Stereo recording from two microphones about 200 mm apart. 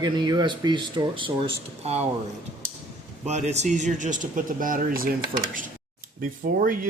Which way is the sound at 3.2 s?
35° right (ahead or behind).